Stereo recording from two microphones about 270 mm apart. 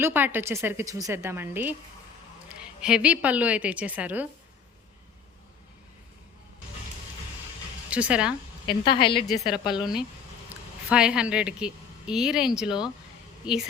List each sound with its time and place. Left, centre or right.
0.0 s a woman's voice: centre
2.8 s a woman's voice: centre
7.9 s speech: centre
8.6 s a woman's voice: centre
9.2 s a woman's voice: centre